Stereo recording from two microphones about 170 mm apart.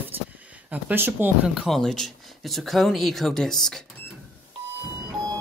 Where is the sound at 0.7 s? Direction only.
10° right (ahead or behind).